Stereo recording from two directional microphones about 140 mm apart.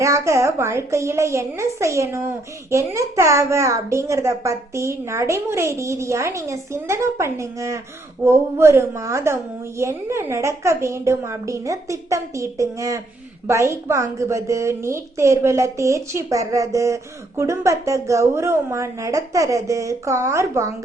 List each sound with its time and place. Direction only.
0.0 s a woman's voice: 20° right (ahead or behind)